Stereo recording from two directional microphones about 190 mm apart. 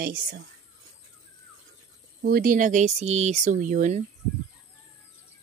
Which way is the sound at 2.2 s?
50° right (ahead or behind).